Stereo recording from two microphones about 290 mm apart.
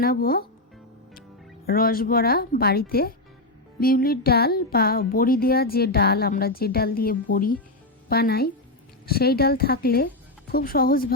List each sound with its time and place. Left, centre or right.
0.0 s speech: left
1.6 s speech: left